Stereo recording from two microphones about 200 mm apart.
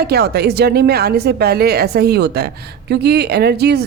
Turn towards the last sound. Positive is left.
turn(degrees=-55)  # may be behind; listen again after turning